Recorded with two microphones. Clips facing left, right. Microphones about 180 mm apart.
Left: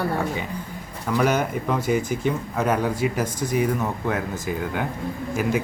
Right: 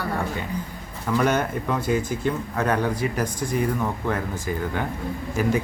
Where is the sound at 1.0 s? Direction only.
5° left (ahead or behind).